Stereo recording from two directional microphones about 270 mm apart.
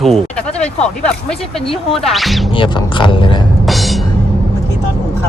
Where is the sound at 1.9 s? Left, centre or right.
Centre.